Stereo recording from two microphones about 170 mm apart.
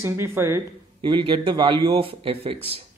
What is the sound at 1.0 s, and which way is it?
Speech, 30° right (ahead or behind).